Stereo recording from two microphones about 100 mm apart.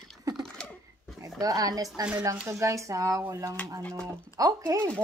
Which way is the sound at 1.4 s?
35° right (ahead or behind).